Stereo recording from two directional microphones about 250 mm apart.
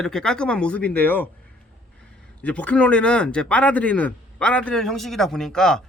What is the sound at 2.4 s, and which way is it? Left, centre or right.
Speech, centre.